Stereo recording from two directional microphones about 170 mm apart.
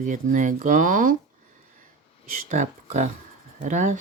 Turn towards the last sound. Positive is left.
turn(degrees=-45)  # may be behind; listen again after turning